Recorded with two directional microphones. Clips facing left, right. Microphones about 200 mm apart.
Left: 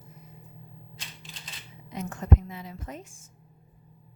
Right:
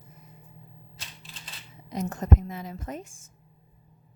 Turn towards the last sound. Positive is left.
turn(degrees=-45)  # may be behind; listen again after turning